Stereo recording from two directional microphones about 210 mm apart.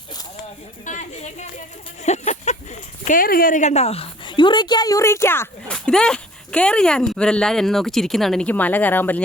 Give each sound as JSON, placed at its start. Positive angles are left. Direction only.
{"t": 0.9, "sound": "a woman's voice", "side_deg": 35}